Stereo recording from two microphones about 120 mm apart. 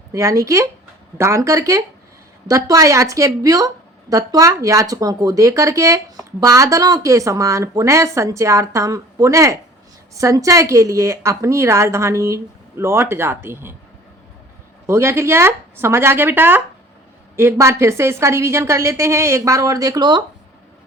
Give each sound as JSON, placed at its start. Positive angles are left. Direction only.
{"t": 0.1, "sound": "a woman's voice", "side_deg": -25}
{"t": 14.8, "sound": "a woman's voice", "side_deg": -20}